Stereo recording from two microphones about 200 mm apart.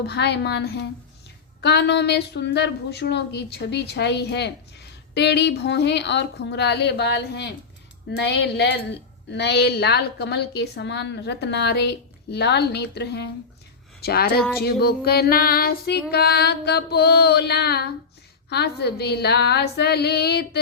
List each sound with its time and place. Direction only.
0.0 s a woman's voice: 55° left (ahead or behind)
14.0 s female singing: 50° left (ahead or behind)
18.4 s a woman's voice: 55° left (ahead or behind)